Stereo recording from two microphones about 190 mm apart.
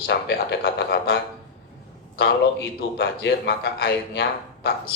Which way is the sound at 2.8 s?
60° left (ahead or behind).